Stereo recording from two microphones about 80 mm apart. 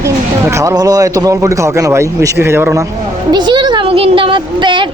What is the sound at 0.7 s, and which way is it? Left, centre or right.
A man's voice, right.